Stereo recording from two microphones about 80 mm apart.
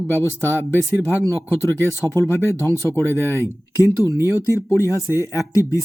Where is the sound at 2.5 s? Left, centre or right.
Right.